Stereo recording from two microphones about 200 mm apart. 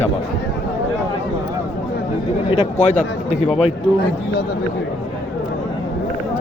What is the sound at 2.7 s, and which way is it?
Speech, 35° left (ahead or behind).